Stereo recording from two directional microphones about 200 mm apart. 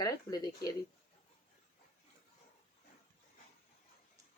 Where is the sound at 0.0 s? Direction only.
20° left (ahead or behind).